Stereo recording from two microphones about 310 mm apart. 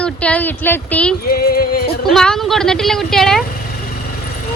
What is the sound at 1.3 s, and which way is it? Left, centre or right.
Music, left.